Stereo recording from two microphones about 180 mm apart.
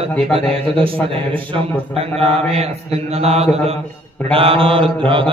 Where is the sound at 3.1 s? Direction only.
35° right (ahead or behind).